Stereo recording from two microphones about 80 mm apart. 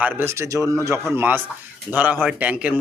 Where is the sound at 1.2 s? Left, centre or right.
Right.